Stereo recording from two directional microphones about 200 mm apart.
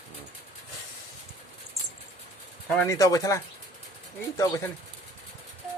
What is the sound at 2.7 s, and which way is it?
Speech, 10° left (ahead or behind).